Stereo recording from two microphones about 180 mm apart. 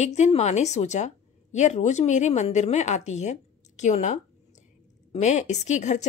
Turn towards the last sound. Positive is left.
turn(degrees=40)  # may be behind; listen again after turning